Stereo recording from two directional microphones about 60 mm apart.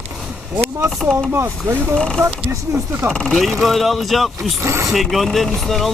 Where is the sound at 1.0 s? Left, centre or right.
Centre.